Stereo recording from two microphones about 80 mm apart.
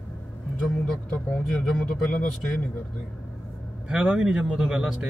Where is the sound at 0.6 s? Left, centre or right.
Centre.